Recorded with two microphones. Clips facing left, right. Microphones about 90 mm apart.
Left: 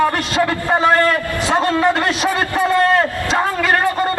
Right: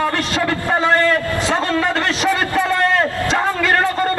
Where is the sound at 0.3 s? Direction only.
20° left (ahead or behind).